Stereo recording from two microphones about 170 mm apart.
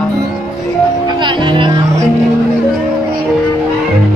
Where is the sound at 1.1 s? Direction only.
30° right (ahead or behind).